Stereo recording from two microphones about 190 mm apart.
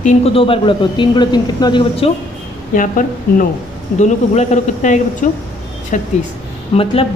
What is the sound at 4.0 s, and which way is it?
A man's voice, 40° left (ahead or behind).